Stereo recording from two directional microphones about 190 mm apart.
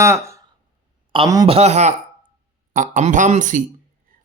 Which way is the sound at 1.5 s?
35° right (ahead or behind).